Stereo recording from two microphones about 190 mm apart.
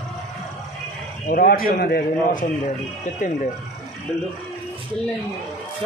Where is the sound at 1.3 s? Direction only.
50° left (ahead or behind).